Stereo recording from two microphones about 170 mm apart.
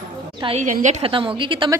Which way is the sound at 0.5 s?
45° right (ahead or behind).